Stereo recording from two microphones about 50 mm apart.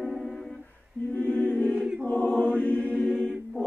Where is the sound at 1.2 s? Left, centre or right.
Left.